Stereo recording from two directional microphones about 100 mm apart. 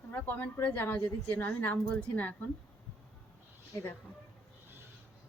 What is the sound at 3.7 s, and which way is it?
Speech, 25° left (ahead or behind).